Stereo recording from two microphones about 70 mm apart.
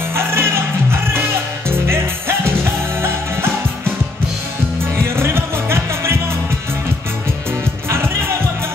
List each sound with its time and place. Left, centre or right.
0.1 s music: right
4.9 s music: right